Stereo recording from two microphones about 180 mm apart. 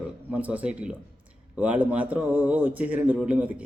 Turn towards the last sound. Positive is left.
turn(degrees=-10)  # may be behind; listen again after turning